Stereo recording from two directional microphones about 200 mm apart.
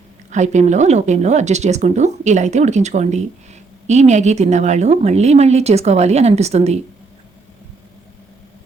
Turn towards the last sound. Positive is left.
turn(degrees=-30)  # may be behind; listen again after turning